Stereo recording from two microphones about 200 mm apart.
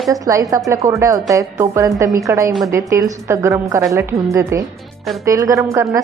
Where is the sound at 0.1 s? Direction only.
15° right (ahead or behind).